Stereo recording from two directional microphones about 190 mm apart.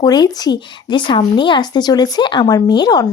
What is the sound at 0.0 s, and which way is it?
Speech, 20° left (ahead or behind).